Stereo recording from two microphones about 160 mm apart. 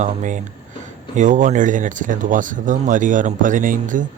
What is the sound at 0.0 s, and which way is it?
A man's voice, 50° right (ahead or behind).